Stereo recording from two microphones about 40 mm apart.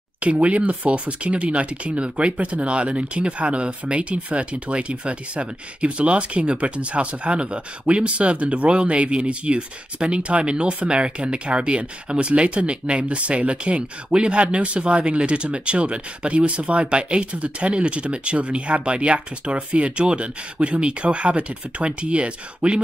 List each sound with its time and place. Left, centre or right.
0.2 s speech: right